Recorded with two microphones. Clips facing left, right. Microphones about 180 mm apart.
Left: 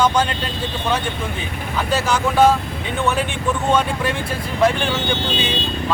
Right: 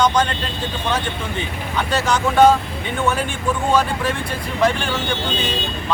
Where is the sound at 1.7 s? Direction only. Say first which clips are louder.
Even; 5° left (ahead or behind).